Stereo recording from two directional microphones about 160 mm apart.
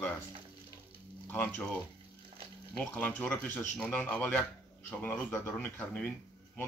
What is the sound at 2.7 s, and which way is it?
Speech, 10° left (ahead or behind).